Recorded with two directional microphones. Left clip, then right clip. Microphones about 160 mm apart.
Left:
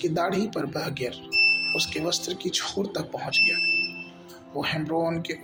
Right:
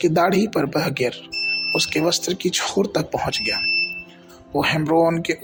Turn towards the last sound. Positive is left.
turn(degrees=-50)  # may be behind; listen again after turning